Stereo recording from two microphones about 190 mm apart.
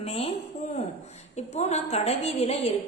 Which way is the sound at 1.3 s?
35° left (ahead or behind).